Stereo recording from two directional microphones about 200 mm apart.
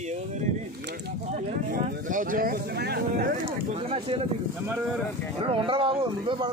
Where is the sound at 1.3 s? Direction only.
40° right (ahead or behind).